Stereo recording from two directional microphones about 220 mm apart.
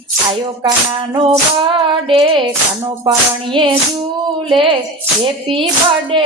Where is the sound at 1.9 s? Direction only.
25° right (ahead or behind).